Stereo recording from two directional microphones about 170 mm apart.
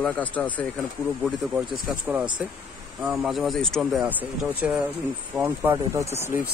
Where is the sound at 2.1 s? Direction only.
10° right (ahead or behind).